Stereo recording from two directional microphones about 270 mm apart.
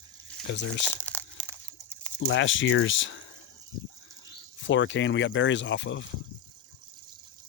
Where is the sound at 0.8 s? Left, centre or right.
Centre.